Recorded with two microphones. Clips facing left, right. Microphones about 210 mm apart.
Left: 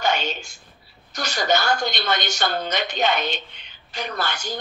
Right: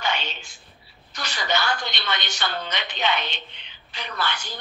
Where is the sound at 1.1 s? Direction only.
45° left (ahead or behind).